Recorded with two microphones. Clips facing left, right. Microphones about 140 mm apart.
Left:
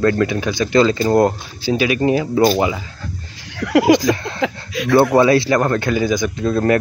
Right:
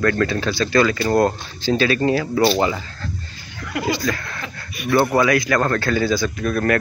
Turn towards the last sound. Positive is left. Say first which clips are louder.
# left 3 dB
turn(degrees=25)  # may be behind; listen again after turning